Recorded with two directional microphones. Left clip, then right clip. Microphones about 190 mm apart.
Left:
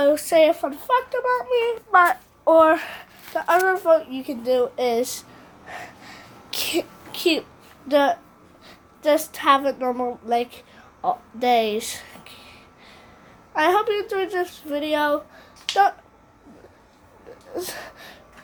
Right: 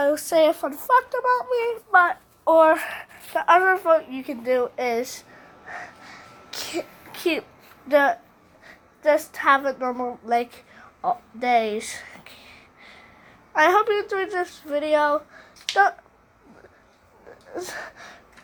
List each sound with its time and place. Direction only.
0.0 s speech: centre (ahead or behind)
1.9 s speech: 10° left (ahead or behind)
5.6 s sneeze: 20° left (ahead or behind)
7.1 s a child's voice: 10° left (ahead or behind)
11.0 s a sound: 10° left (ahead or behind)
13.5 s speech: 5° right (ahead or behind)
17.5 s speech: 10° left (ahead or behind)